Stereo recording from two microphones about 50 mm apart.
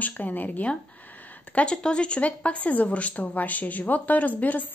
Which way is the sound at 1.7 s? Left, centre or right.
Left.